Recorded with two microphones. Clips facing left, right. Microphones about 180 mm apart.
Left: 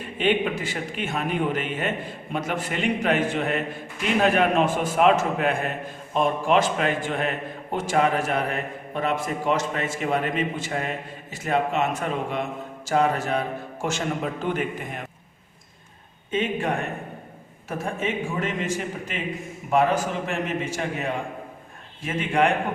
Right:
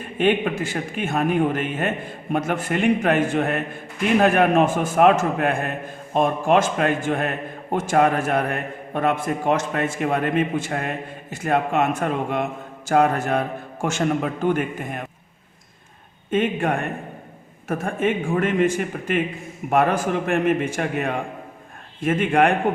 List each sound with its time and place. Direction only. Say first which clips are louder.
0.2 s a man's voice: right 3 dB; 50° right (ahead or behind)
14.4 s a man's voice: right 6 dB; 50° right (ahead or behind)
16.3 s a man's voice: right 4 dB; 55° right (ahead or behind)